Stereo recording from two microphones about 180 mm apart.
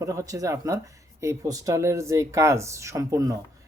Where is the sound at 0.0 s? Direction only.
15° right (ahead or behind).